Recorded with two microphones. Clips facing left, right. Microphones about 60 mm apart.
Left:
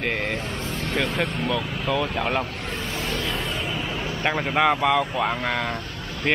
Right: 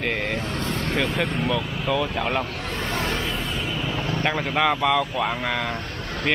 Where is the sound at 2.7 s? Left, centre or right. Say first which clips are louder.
Right 4 dB; right.